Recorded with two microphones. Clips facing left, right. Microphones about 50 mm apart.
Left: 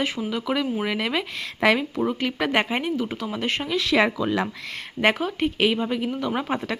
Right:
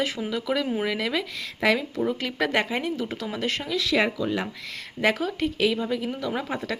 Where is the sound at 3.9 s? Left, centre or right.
Left.